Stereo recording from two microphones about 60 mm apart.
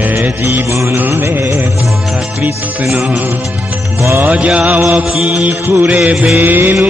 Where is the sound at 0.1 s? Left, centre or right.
Right.